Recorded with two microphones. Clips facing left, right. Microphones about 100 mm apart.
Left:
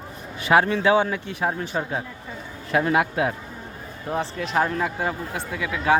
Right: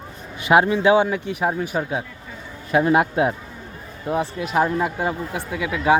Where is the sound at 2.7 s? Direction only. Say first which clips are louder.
Right 3 dB; 20° right (ahead or behind).